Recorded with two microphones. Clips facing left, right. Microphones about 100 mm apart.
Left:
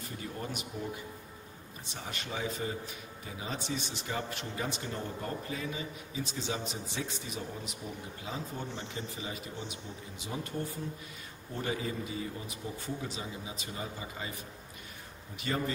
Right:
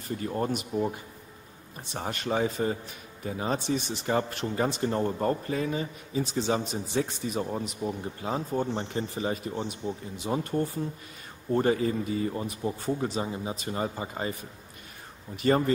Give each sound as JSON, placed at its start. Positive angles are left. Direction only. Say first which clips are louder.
{"t": 0.2, "sound": "speech", "louder": "right 10 dB", "side_deg": -50}
{"t": 2.0, "sound": "speech", "louder": "right 10 dB", "side_deg": -45}
{"t": 15.3, "sound": "speech", "louder": "right 10 dB", "side_deg": -45}